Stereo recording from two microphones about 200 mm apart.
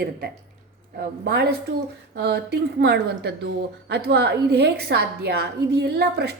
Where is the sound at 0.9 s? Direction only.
55° right (ahead or behind).